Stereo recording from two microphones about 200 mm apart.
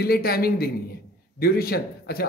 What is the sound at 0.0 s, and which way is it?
A man's voice, 50° left (ahead or behind).